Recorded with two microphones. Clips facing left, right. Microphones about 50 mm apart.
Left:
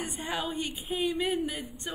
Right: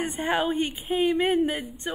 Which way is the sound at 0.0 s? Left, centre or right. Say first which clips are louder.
Right 8 dB; right.